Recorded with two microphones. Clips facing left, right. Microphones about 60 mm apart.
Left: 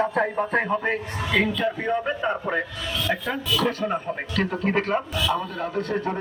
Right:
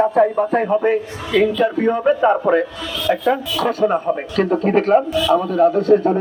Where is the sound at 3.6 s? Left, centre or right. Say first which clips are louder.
Right 7 dB; centre.